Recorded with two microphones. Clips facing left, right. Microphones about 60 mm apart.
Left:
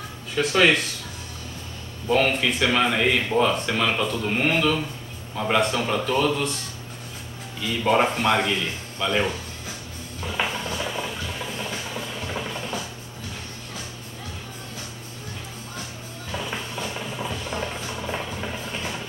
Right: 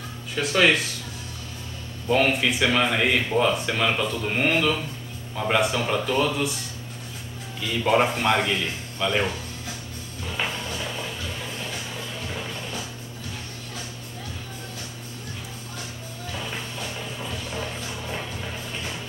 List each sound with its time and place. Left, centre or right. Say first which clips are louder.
0.4 s speech: left 1 dB; centre
2.0 s speech: even; centre
7.6 s speech: even; centre
10.3 s music: left 2 dB; left
17.6 s music: left 2 dB; centre